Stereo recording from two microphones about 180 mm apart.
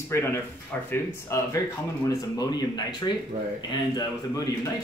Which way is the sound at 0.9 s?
15° left (ahead or behind).